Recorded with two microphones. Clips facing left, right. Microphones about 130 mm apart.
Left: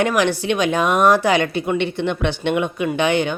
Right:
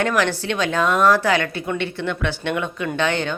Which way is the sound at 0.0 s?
15° left (ahead or behind).